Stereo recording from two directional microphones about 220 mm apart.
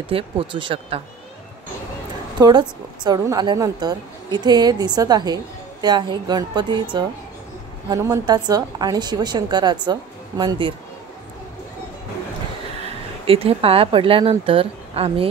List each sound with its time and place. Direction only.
0.1 s a woman's voice: 25° right (ahead or behind)
2.3 s a woman's voice: 20° right (ahead or behind)
12.8 s speech: 25° right (ahead or behind)